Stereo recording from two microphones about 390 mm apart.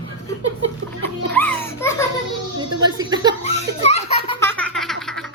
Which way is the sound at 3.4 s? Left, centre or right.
Centre.